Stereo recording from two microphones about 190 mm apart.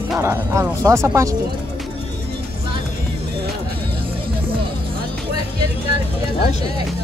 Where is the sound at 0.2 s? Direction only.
15° right (ahead or behind).